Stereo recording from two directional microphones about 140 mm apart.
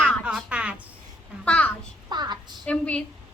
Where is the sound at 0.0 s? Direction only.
5° right (ahead or behind).